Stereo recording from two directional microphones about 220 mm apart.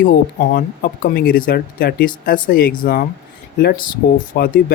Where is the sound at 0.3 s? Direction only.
40° left (ahead or behind).